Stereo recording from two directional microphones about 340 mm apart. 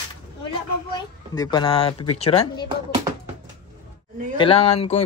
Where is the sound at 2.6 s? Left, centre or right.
Centre.